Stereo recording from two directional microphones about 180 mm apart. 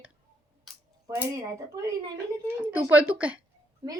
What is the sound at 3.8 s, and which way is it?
Speech, 25° right (ahead or behind).